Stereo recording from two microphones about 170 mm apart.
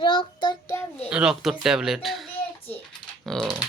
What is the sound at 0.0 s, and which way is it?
Child singing, 30° left (ahead or behind).